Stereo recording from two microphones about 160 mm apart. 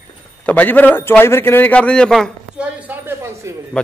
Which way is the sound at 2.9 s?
15° right (ahead or behind).